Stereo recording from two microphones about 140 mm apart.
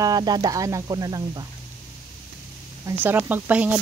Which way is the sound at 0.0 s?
30° right (ahead or behind).